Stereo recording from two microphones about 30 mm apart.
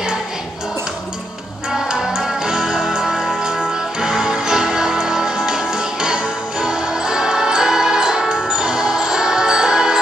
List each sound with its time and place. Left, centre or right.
2.1 s music: right